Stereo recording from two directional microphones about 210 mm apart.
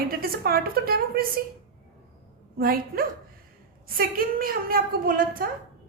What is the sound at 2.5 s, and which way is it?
A woman's voice, 45° right (ahead or behind).